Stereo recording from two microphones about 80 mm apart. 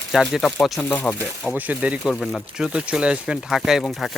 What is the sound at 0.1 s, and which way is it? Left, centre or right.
Speech, centre.